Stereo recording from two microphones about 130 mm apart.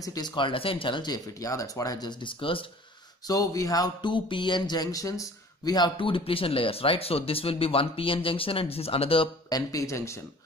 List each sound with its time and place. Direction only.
0.0 s speech: 30° left (ahead or behind)
3.3 s speech: 30° left (ahead or behind)
5.7 s speech: 35° left (ahead or behind)
9.5 s speech: 25° left (ahead or behind)